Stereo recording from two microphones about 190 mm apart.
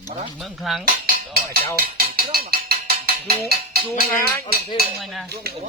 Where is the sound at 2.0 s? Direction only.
50° right (ahead or behind).